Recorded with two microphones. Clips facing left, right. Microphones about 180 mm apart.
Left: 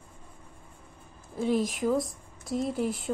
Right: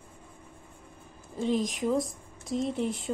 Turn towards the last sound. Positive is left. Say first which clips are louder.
# even
turn(degrees=5)  # may be behind; listen again after turning